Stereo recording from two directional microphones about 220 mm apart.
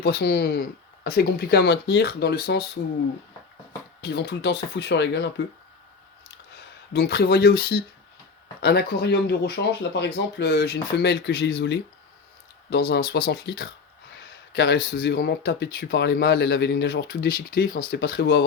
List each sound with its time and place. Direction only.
0.0 s speech: 45° left (ahead or behind)
4.0 s speech: 50° left (ahead or behind)
6.5 s speech: 45° left (ahead or behind)